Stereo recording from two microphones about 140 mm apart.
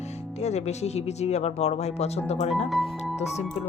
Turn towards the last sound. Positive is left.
turn(degrees=0)  # may be behind; listen again after turning